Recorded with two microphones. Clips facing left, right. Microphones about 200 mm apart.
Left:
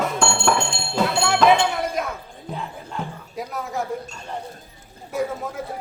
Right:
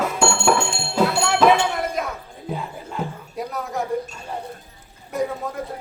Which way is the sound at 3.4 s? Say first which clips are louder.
Right 1 dB; centre (ahead or behind).